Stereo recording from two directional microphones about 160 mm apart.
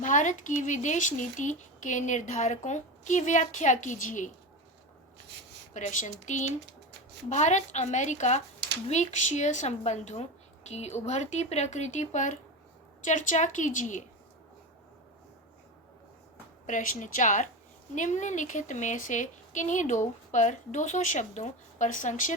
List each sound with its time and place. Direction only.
0.0 s a woman's voice: 50° left (ahead or behind)
5.7 s a woman's voice: 50° left (ahead or behind)
16.6 s a woman's voice: 55° left (ahead or behind)